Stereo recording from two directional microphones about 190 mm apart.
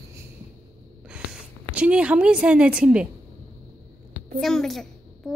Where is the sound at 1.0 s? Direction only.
5° right (ahead or behind).